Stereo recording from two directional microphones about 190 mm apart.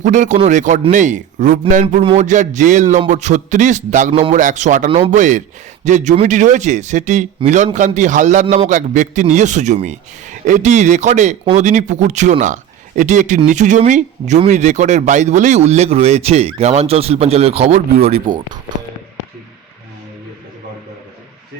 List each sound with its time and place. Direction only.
0.0 s speech: 40° right (ahead or behind)
4.9 s speech: 30° right (ahead or behind)
5.1 s speech: 40° right (ahead or behind)